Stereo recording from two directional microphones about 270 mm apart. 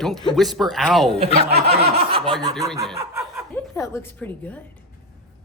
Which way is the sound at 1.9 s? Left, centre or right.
Centre.